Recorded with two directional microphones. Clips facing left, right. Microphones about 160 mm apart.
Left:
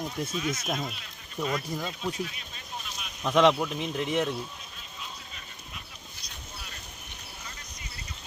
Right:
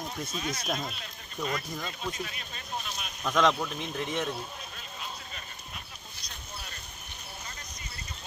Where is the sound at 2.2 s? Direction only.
50° right (ahead or behind).